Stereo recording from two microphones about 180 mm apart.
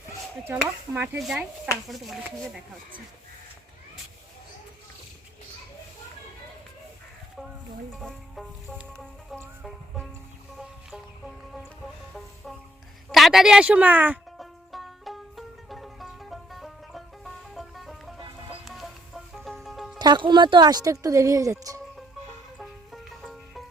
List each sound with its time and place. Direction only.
0.4 s speech: 10° right (ahead or behind)
7.9 s music: centre (ahead or behind)
13.1 s music: centre (ahead or behind)
18.2 s music: 30° right (ahead or behind)
18.6 s music: centre (ahead or behind)
20.0 s speech: 25° right (ahead or behind)
22.5 s music: centre (ahead or behind)